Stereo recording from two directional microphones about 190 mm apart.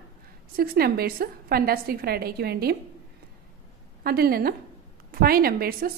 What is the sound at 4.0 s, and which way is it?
A woman's voice, 55° right (ahead or behind).